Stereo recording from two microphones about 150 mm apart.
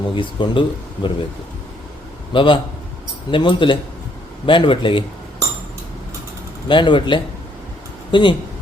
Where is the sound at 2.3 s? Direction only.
35° left (ahead or behind).